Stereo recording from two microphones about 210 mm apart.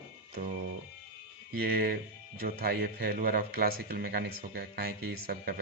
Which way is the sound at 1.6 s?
45° right (ahead or behind).